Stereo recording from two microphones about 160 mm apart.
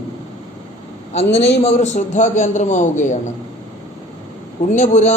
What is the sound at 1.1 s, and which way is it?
Speech, 40° left (ahead or behind).